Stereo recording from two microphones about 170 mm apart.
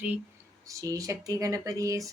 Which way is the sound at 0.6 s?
20° right (ahead or behind).